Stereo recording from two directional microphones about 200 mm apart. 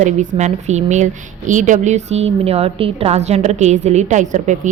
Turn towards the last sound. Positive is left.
turn(degrees=-35)  # may be behind; listen again after turning